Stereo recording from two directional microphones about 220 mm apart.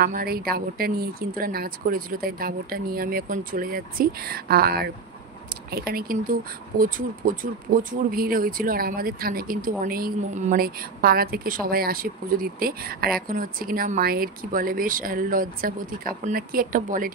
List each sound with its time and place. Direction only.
0.0 s speech: 45° right (ahead or behind)